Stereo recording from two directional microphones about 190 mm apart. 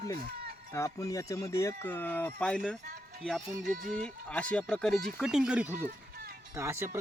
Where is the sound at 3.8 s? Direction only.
5° left (ahead or behind).